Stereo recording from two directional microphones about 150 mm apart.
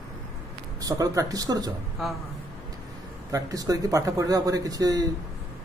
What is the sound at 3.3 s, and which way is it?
Speech, 25° right (ahead or behind).